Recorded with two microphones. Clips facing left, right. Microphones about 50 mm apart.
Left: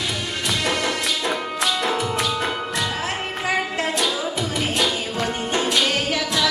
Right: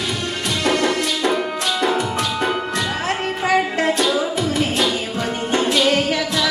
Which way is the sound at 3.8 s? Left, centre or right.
Centre.